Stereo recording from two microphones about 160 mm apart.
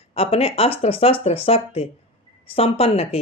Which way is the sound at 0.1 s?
40° left (ahead or behind).